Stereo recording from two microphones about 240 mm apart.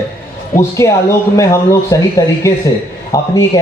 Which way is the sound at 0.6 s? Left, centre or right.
Centre.